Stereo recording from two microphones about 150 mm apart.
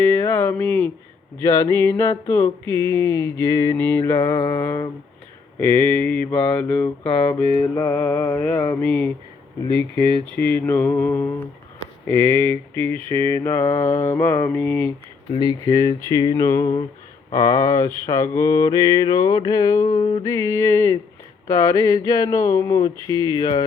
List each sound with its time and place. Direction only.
0.0 s a sound: 20° left (ahead or behind)
1.4 s mantra: 15° left (ahead or behind)
9.6 s speech: 35° right (ahead or behind)
10.3 s mantra: 10° left (ahead or behind)
15.3 s mantra: 30° left (ahead or behind)
20.2 s mantra: 20° left (ahead or behind)
23.4 s a sound: 30° left (ahead or behind)